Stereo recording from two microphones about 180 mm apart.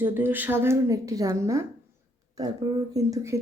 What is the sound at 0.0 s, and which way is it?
Speech, 10° right (ahead or behind).